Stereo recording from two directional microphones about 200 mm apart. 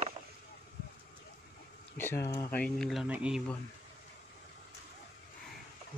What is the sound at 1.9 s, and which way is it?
Speech, 10° left (ahead or behind).